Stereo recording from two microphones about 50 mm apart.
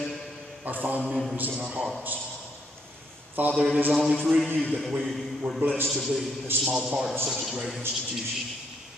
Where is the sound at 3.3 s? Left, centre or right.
Right.